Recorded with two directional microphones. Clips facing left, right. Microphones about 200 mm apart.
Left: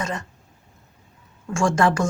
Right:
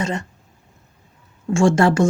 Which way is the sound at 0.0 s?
25° right (ahead or behind).